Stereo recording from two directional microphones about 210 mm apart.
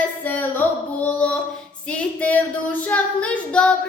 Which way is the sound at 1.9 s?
5° left (ahead or behind).